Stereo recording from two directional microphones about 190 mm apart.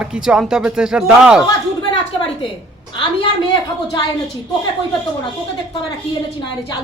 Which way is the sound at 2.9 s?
25° left (ahead or behind).